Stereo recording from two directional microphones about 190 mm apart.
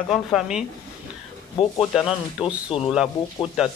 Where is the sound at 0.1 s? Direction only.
Centre (ahead or behind).